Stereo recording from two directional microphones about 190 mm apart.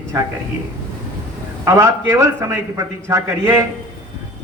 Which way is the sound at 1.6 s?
15° right (ahead or behind).